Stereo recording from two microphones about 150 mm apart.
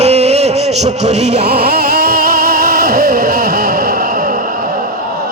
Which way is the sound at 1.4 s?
90° right.